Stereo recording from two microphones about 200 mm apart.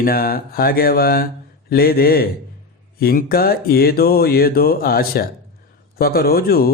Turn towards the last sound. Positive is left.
turn(degrees=50)  # may be behind; listen again after turning